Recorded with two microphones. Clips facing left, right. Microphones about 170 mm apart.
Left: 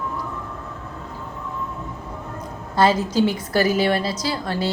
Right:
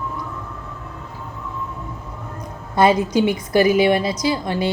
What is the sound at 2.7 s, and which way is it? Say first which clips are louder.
A woman's voice: right 3 dB; 15° right (ahead or behind).